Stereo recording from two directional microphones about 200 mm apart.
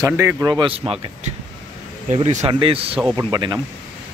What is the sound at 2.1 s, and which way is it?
Speech, 30° right (ahead or behind).